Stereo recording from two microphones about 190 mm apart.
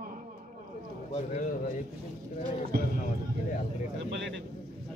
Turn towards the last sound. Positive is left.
turn(degrees=-65)  # may be behind; listen again after turning